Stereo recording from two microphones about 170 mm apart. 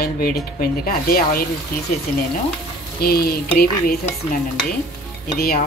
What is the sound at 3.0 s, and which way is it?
Speech, 65° left (ahead or behind).